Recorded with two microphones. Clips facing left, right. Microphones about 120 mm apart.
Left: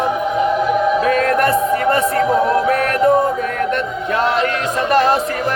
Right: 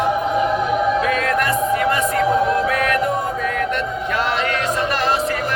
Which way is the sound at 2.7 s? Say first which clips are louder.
Left 2 dB; 40° left (ahead or behind).